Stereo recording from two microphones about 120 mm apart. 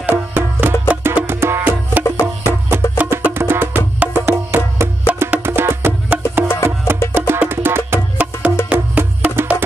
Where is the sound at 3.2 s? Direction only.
20° right (ahead or behind).